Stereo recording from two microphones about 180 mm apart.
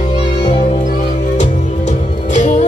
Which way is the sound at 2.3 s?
40° left (ahead or behind).